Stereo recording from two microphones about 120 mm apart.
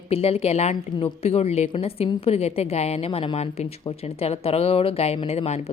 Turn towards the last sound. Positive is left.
turn(degrees=60)  # may be behind; listen again after turning